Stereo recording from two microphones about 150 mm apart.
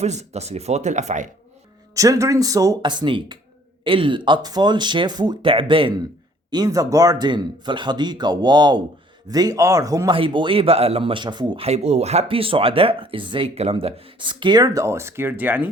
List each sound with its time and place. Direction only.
0.0 s speech: 50° right (ahead or behind)
2.0 s speech: 20° right (ahead or behind)
10.2 s speech: 35° right (ahead or behind)
11.6 s speech: 45° right (ahead or behind); by 15.7 s 10° right (ahead or behind)